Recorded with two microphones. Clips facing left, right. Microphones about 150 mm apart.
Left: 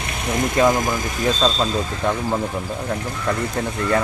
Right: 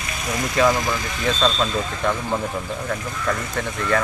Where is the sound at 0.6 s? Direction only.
20° left (ahead or behind).